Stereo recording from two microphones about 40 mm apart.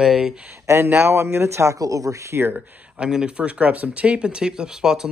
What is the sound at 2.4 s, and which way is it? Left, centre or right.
Speech, right.